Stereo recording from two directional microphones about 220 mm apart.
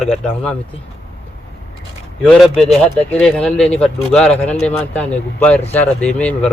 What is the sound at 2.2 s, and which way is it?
Speech, centre (ahead or behind).